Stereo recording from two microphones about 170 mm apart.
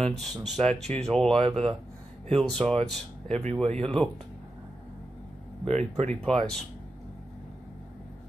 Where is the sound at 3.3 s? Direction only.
40° right (ahead or behind).